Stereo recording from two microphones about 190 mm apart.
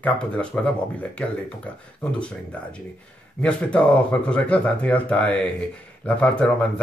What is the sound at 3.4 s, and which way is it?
Speech, 5° left (ahead or behind).